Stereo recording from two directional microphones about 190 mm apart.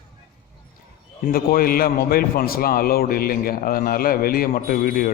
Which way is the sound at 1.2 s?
50° left (ahead or behind).